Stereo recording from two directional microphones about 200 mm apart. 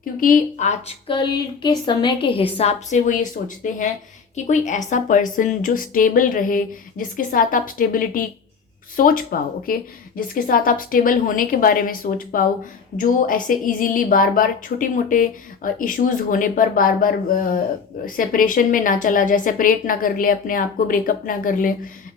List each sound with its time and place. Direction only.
0.2 s a woman's voice: 40° left (ahead or behind)